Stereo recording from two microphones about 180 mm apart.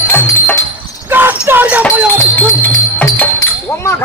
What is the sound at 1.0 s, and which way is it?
Speech, 10° right (ahead or behind).